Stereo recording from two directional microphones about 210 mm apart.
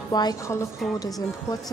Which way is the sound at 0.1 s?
20° left (ahead or behind).